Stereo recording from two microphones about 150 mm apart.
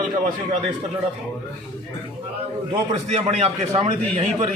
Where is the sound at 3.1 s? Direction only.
45° right (ahead or behind).